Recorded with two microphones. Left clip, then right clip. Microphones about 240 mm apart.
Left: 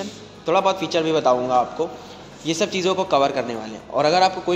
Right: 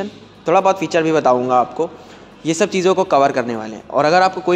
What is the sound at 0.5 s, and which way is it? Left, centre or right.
A man's voice, right.